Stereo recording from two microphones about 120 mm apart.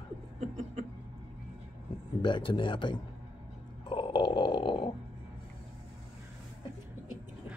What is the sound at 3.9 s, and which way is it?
Grunt, 40° left (ahead or behind).